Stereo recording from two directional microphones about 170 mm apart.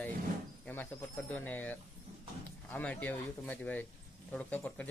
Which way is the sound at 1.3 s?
10° left (ahead or behind).